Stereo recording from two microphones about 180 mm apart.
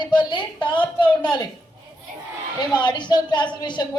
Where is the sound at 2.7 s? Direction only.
25° left (ahead or behind).